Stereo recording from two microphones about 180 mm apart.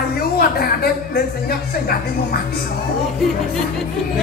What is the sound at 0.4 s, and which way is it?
Speech, 55° left (ahead or behind).